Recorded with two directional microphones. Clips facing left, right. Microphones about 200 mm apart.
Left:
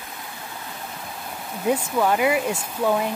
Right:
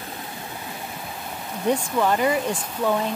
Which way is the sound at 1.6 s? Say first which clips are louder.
Even; 5° left (ahead or behind).